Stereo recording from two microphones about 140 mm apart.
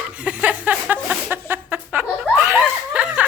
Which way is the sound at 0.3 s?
10° right (ahead or behind).